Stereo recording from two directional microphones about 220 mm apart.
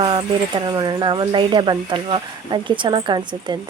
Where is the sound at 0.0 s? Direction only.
20° right (ahead or behind).